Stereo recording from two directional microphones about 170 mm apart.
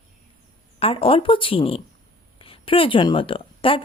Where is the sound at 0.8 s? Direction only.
35° left (ahead or behind).